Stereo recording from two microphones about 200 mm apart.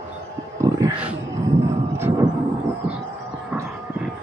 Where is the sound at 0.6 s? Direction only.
15° right (ahead or behind).